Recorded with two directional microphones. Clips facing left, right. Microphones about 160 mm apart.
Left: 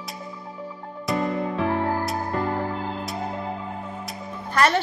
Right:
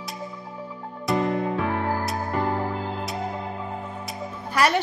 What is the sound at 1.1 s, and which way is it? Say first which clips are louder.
Music: right 2 dB; centre (ahead or behind).